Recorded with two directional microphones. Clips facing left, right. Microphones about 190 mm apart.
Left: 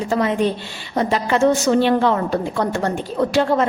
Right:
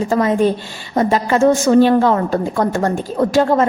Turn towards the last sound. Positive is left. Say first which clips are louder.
# right 3 dB
turn(degrees=-45)  # may be behind; listen again after turning